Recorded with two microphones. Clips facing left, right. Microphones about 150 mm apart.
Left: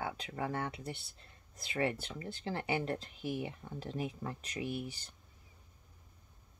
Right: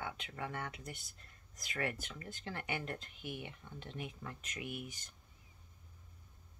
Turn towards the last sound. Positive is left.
turn(degrees=30)  # may be behind; listen again after turning